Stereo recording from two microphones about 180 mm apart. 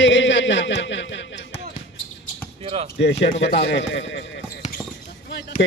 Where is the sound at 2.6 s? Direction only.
35° right (ahead or behind).